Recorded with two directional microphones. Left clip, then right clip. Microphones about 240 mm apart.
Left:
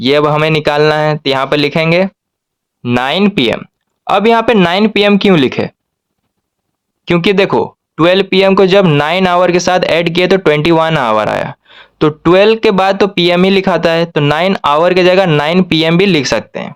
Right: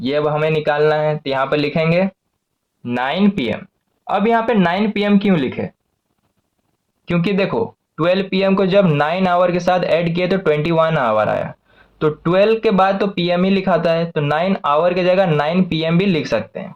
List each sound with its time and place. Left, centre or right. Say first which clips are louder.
0.0 s speech: left 7 dB; left
3.0 s speech: left 6 dB; left
7.0 s speech: left 9 dB; left